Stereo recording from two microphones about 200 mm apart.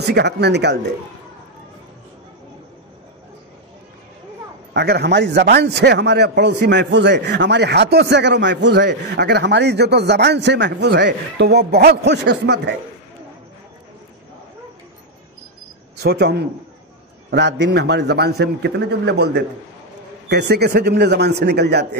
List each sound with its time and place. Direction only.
0.0 s a man's voice: 55° right (ahead or behind)
4.7 s a man's voice: 55° right (ahead or behind)
16.0 s a man's voice: 55° right (ahead or behind)